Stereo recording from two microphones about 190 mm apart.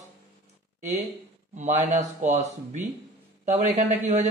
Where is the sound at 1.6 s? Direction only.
35° right (ahead or behind).